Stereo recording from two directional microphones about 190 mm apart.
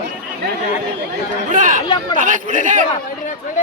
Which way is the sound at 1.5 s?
40° right (ahead or behind).